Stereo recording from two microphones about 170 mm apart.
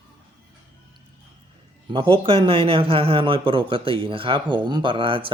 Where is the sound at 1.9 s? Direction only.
30° right (ahead or behind).